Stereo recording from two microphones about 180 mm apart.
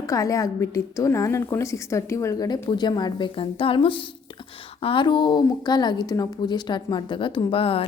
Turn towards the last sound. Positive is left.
turn(degrees=30)  # may be behind; listen again after turning